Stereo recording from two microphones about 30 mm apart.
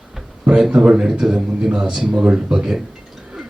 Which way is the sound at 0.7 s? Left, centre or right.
Right.